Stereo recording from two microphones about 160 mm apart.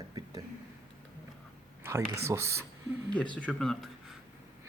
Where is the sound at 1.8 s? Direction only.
15° right (ahead or behind).